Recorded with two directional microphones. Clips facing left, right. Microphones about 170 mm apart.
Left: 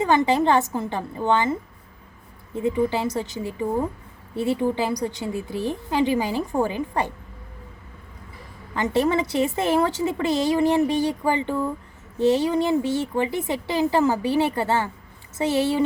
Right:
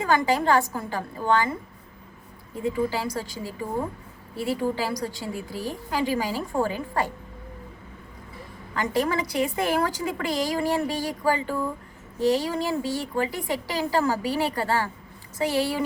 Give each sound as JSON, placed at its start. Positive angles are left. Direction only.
{"t": 0.0, "sound": "a woman's voice", "side_deg": 20}
{"t": 2.6, "sound": "a woman's voice", "side_deg": 20}
{"t": 8.7, "sound": "a woman's voice", "side_deg": 25}